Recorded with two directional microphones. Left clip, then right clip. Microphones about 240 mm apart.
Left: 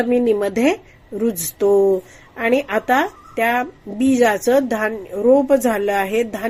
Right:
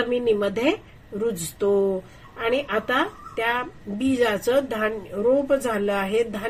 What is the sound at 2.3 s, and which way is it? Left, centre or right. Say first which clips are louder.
Speech: left 5 dB; left.